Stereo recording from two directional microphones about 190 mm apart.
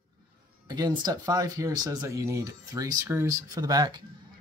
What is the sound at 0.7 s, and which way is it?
Speech, 20° right (ahead or behind).